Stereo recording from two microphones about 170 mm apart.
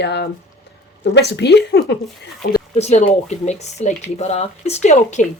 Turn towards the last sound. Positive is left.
turn(degrees=45)  # may be behind; listen again after turning